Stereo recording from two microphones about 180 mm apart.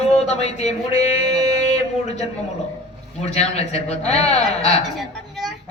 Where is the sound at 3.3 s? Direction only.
35° left (ahead or behind).